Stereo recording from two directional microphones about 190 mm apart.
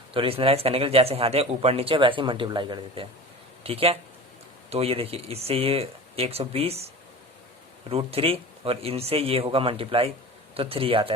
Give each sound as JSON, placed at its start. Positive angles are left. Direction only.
{"t": 0.1, "sound": "speech", "side_deg": -30}